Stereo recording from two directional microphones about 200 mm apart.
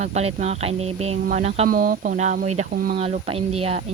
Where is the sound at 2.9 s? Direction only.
30° right (ahead or behind).